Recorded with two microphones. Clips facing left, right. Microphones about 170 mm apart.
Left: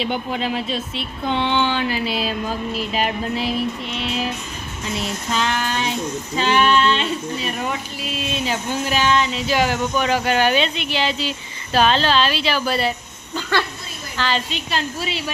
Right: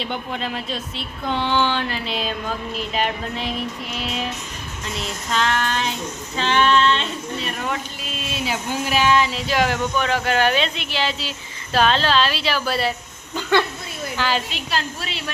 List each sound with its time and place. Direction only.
0.0 s speech: 5° left (ahead or behind)
13.3 s speech: 15° right (ahead or behind); by 15.2 s centre (ahead or behind)